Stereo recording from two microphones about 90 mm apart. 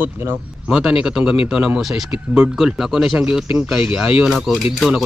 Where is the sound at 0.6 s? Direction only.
10° right (ahead or behind).